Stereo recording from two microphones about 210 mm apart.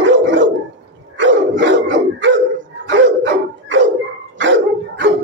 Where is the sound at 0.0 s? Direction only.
60° right (ahead or behind).